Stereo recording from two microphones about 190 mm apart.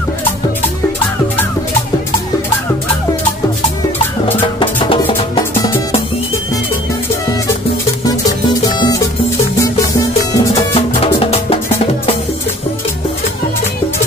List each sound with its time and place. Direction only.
4.6 s music: 25° left (ahead or behind)
5.5 s music: 15° left (ahead or behind)
8.0 s music: 20° left (ahead or behind)
11.1 s music: 30° left (ahead or behind)